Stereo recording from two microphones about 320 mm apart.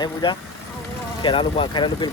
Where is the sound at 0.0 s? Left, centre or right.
Centre.